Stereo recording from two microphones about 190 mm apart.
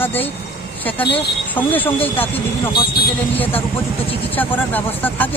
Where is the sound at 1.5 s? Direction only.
10° left (ahead or behind).